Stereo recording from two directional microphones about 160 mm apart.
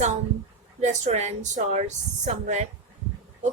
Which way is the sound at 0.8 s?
45° right (ahead or behind).